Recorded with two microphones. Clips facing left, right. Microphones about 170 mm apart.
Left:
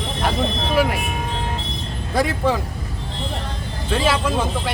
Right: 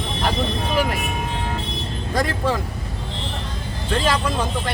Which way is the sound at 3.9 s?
10° left (ahead or behind).